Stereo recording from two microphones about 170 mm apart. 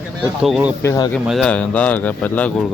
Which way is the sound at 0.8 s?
20° left (ahead or behind).